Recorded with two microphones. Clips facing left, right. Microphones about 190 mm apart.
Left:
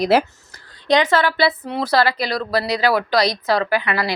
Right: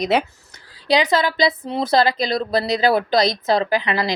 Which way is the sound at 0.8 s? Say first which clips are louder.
Left 1 dB; 10° right (ahead or behind).